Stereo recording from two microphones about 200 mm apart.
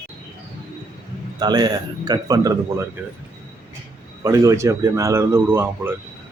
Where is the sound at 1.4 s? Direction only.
20° right (ahead or behind).